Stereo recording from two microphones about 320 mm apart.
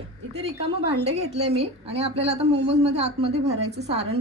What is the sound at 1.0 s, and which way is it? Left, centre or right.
A woman's voice, centre.